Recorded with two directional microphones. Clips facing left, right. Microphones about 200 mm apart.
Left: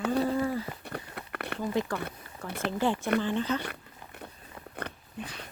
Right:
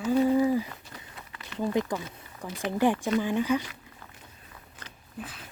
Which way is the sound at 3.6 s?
60° left (ahead or behind).